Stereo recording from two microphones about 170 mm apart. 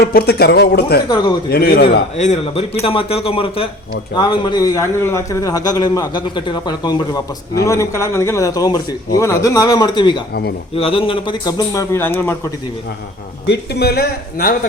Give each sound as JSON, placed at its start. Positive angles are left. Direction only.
{"t": 0.0, "sound": "speech", "side_deg": 65}
{"t": 1.0, "sound": "a man's voice", "side_deg": 25}
{"t": 1.5, "sound": "speech", "side_deg": 65}
{"t": 2.1, "sound": "a man's voice", "side_deg": 40}
{"t": 13.5, "sound": "speech", "side_deg": 75}